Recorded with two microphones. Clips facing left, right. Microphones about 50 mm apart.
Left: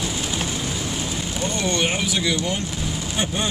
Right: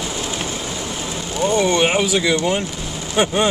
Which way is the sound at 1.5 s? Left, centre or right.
Right.